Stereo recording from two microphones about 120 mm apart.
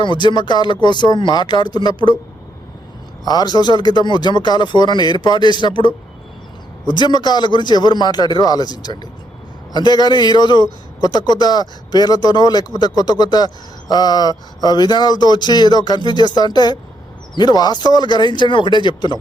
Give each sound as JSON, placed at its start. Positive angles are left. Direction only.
{"t": 0.0, "sound": "a man's voice", "side_deg": 40}
{"t": 3.2, "sound": "a man's voice", "side_deg": 35}